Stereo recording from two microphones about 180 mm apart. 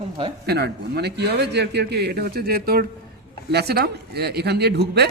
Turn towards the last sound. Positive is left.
turn(degrees=-65)  # may be behind; listen again after turning